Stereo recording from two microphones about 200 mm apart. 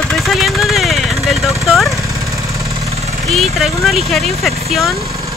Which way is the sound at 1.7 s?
Centre (ahead or behind).